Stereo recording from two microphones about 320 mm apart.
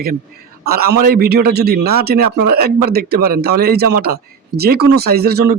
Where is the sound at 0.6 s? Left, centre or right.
Right.